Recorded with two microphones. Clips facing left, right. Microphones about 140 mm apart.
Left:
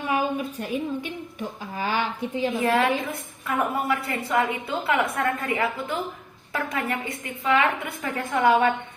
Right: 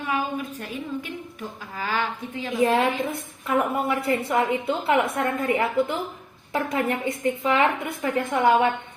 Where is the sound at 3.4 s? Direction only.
25° right (ahead or behind).